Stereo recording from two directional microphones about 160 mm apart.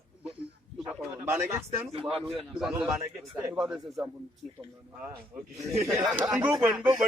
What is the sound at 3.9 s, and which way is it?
Speech, 20° right (ahead or behind).